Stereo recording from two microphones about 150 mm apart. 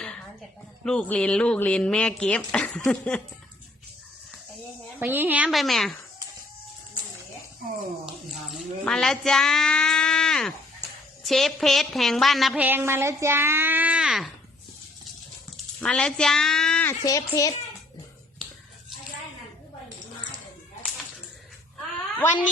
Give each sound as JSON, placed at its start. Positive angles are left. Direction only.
{"t": 0.9, "sound": "speech", "side_deg": 10}
{"t": 4.9, "sound": "speech", "side_deg": -15}
{"t": 5.5, "sound": "speech", "side_deg": 0}
{"t": 8.0, "sound": "speech", "side_deg": 0}
{"t": 12.5, "sound": "speech", "side_deg": -15}
{"t": 15.4, "sound": "speech", "side_deg": 5}
{"t": 17.0, "sound": "speech", "side_deg": 25}
{"t": 21.8, "sound": "a sound", "side_deg": 10}